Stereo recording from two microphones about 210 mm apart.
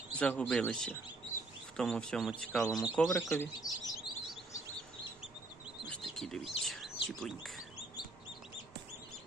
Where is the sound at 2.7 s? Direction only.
15° left (ahead or behind).